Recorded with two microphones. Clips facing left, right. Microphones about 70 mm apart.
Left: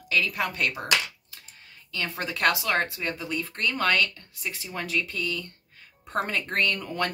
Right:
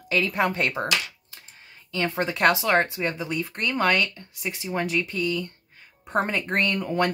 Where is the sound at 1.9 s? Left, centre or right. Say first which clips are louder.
Right 6 dB; right.